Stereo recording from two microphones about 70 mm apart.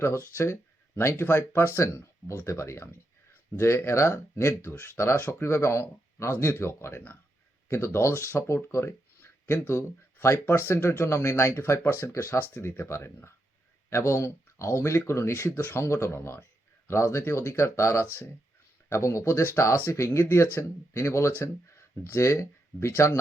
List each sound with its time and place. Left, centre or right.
0.3 s speech: left